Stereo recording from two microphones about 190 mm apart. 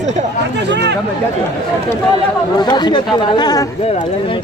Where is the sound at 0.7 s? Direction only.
60° right (ahead or behind).